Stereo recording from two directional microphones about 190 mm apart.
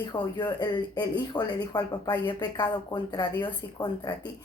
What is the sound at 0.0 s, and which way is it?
Speech, 20° left (ahead or behind).